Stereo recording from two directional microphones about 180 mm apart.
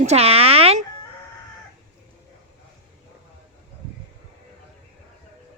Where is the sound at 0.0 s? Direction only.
35° right (ahead or behind).